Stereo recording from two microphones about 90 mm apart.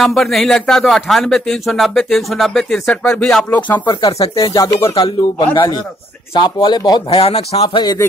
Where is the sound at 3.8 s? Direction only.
55° left (ahead or behind); by 4.8 s 40° left (ahead or behind).